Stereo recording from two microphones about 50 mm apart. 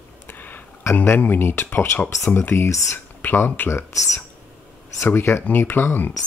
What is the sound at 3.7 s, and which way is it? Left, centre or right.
Speech, left.